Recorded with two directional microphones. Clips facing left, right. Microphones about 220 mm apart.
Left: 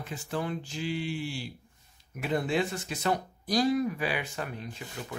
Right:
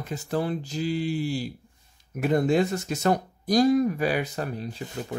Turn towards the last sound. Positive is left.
turn(degrees=-35)  # may be behind; listen again after turning